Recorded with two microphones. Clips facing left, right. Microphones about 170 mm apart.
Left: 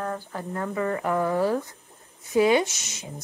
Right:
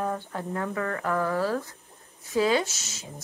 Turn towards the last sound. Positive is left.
turn(degrees=15)  # may be behind; listen again after turning